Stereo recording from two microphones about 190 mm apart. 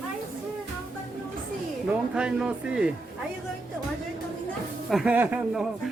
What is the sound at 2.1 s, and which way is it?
Speech, 5° right (ahead or behind).